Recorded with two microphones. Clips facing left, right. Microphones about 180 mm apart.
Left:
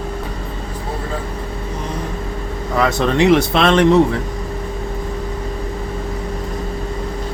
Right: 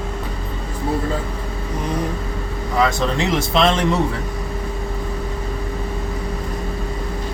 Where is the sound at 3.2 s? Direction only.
65° left (ahead or behind).